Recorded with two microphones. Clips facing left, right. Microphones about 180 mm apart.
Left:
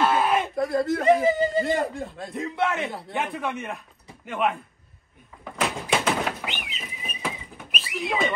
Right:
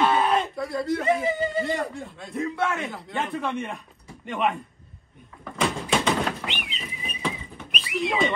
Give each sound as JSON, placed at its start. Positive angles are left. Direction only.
{"t": 0.0, "sound": "a sound", "side_deg": 5}
{"t": 0.6, "sound": "speech", "side_deg": 55}
{"t": 1.3, "sound": "speech", "side_deg": 0}
{"t": 1.8, "sound": "speech", "side_deg": 35}
{"t": 2.3, "sound": "a man's voice", "side_deg": 20}
{"t": 3.2, "sound": "speech", "side_deg": 5}
{"t": 5.4, "sound": "door", "side_deg": 5}
{"t": 6.8, "sound": "a sound", "side_deg": 5}